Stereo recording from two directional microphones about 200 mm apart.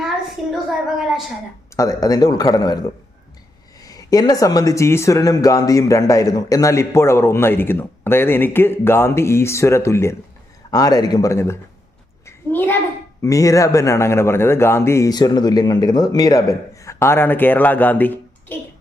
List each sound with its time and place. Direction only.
0.5 s a woman's voice: centre (ahead or behind)
1.7 s speech: 15° left (ahead or behind)
3.8 s speech: 20° left (ahead or behind)
12.2 s a sound: 10° left (ahead or behind)
13.2 s speech: 15° left (ahead or behind)